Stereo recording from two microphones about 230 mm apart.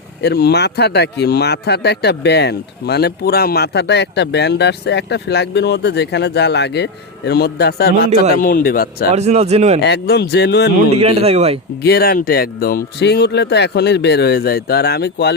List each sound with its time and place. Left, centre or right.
0.2 s speech: left
9.1 s speech: right
9.8 s speech: left
10.9 s speech: right
11.8 s speech: left